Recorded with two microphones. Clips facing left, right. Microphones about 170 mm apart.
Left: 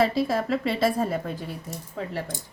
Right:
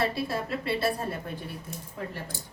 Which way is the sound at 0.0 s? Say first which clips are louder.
Left 6 dB; 90° left.